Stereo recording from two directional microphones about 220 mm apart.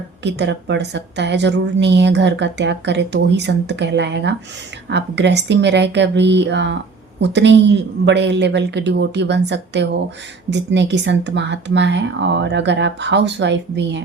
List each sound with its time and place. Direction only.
0.2 s a woman's voice: 50° right (ahead or behind)